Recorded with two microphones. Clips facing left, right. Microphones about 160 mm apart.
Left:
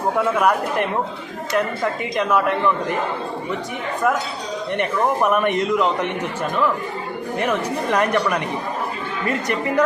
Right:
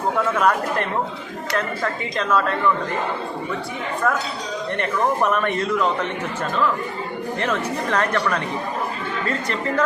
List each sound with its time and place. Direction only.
0.3 s a man's voice: 10° left (ahead or behind)
4.0 s a man's voice: 15° left (ahead or behind)
7.3 s a man's voice: 15° left (ahead or behind)